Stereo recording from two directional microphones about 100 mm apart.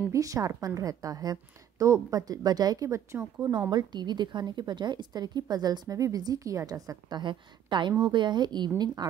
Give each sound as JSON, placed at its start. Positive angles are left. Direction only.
{"t": 0.1, "sound": "a woman's voice", "side_deg": -35}
{"t": 3.7, "sound": "speech", "side_deg": -45}